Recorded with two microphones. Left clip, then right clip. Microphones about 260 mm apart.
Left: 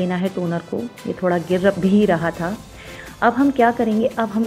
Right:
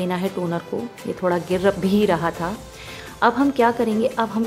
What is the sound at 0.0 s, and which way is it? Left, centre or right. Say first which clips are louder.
A woman's voice: left 1 dB; centre.